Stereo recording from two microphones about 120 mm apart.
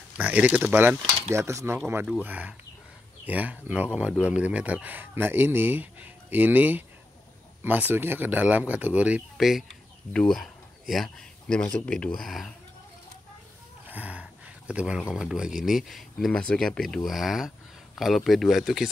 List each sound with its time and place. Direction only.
0.2 s speech: 10° right (ahead or behind)
1.3 s speech: 25° right (ahead or behind)
2.2 s speech: 15° right (ahead or behind); by 12.5 s centre (ahead or behind)
13.8 s a sound: 15° right (ahead or behind)
15.1 s speech: 5° right (ahead or behind)